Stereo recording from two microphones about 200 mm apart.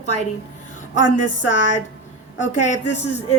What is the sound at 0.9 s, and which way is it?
A woman's voice, 40° left (ahead or behind).